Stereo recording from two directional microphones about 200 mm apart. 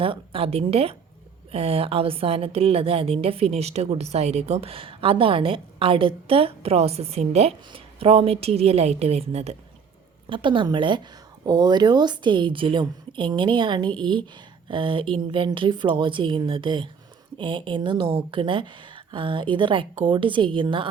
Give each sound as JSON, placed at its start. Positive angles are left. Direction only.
{"t": 0.0, "sound": "a woman's voice", "side_deg": -25}